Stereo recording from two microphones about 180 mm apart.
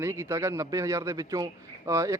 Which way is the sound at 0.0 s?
15° right (ahead or behind).